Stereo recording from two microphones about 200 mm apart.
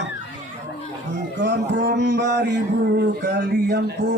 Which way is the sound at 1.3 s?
60° right (ahead or behind).